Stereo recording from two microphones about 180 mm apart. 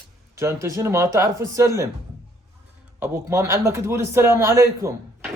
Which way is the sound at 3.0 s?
15° right (ahead or behind).